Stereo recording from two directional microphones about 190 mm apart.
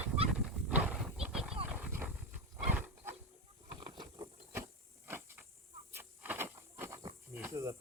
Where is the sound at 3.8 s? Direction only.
25° right (ahead or behind).